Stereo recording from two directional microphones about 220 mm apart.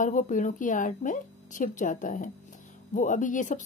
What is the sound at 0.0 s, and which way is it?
Speech, 35° left (ahead or behind).